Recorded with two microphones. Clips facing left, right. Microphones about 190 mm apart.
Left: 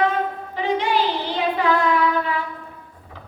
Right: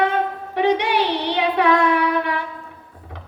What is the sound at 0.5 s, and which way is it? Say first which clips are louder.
Child singing: right 3 dB; 70° right (ahead or behind).